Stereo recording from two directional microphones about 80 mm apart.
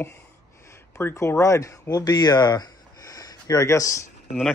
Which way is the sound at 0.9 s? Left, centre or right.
Left.